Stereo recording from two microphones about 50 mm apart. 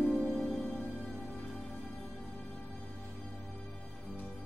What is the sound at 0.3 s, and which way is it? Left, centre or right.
Music, centre.